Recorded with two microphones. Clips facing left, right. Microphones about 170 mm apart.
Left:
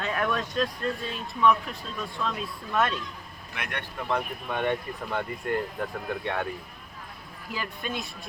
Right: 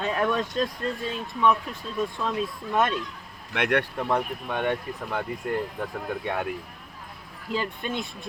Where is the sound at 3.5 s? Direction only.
70° right (ahead or behind).